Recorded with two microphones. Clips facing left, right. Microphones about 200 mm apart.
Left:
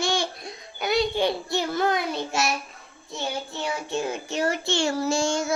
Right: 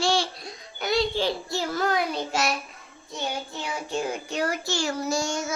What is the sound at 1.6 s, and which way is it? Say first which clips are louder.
Child singing: left 1 dB; 25° left (ahead or behind).